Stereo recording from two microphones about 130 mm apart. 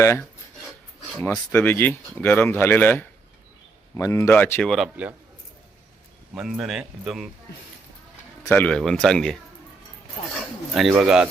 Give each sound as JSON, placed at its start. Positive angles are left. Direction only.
{"t": 0.0, "sound": "speech", "side_deg": 20}
{"t": 1.5, "sound": "speech", "side_deg": 15}
{"t": 5.0, "sound": "a man's voice", "side_deg": -10}
{"t": 6.3, "sound": "speech", "side_deg": -5}
{"t": 8.4, "sound": "speech", "side_deg": 15}
{"t": 8.7, "sound": "speech", "side_deg": 5}
{"t": 10.8, "sound": "speech", "side_deg": 0}